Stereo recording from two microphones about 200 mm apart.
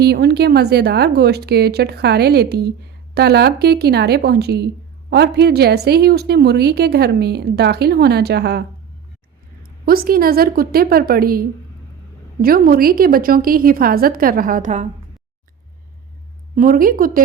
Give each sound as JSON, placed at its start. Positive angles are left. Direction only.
{"t": 0.0, "sound": "a woman's voice", "side_deg": -55}
{"t": 9.8, "sound": "a woman's voice", "side_deg": -50}
{"t": 16.6, "sound": "a woman's voice", "side_deg": -45}